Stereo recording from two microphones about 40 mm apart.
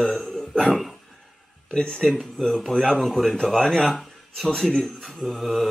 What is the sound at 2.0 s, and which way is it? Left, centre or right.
Speech, centre.